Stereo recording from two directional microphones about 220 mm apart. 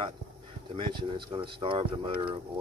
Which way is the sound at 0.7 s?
20° right (ahead or behind).